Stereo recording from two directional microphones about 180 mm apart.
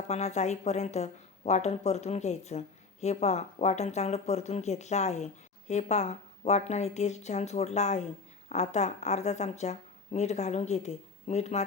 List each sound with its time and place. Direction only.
0.1 s a woman's voice: 40° left (ahead or behind)